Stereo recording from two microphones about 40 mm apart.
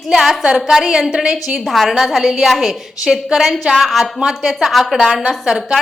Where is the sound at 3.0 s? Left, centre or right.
Centre.